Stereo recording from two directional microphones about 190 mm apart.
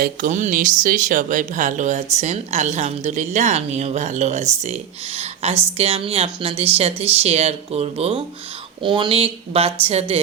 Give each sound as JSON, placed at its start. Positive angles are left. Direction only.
{"t": 0.0, "sound": "speech", "side_deg": -45}